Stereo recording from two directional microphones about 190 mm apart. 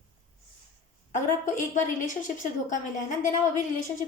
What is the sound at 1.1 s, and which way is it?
A woman's voice, 40° left (ahead or behind).